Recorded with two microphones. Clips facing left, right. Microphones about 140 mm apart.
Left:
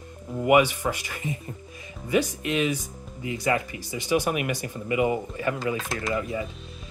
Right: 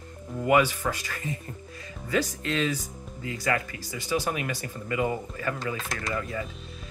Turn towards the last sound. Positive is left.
turn(degrees=20)  # may be behind; listen again after turning